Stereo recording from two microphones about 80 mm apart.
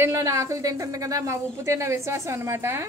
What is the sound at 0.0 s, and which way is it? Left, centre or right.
Speech, right.